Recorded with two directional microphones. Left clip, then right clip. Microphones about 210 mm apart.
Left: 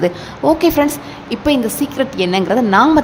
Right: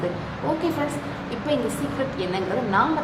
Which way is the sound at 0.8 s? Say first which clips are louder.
Left 12 dB; 55° left (ahead or behind).